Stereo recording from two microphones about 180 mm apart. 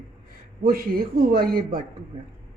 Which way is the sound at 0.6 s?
55° right (ahead or behind).